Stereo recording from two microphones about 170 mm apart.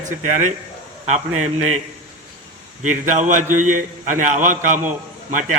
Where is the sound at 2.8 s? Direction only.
50° right (ahead or behind).